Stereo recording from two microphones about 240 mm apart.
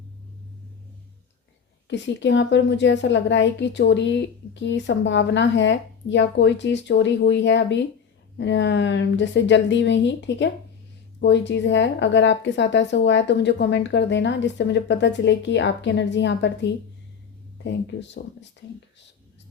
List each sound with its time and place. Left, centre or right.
1.9 s a woman's voice: left